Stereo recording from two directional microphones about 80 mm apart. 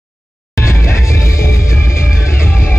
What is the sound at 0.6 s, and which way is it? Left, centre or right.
Music, left.